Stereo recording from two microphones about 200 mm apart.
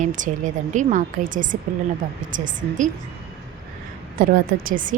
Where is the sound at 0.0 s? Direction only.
40° right (ahead or behind).